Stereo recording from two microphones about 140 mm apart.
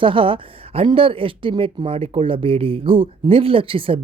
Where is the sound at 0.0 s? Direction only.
40° right (ahead or behind).